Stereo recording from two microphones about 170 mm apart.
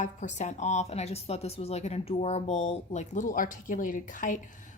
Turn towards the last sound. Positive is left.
turn(degrees=50)  # may be behind; listen again after turning